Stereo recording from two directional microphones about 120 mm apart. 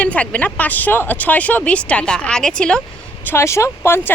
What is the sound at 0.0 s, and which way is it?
Speech, 10° left (ahead or behind).